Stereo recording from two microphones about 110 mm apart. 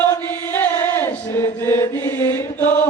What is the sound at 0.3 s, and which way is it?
Chant, 15° left (ahead or behind).